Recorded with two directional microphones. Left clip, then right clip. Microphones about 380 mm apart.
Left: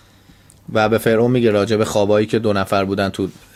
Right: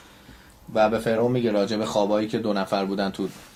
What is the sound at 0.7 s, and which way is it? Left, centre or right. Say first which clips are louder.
Speech: left 6 dB; left.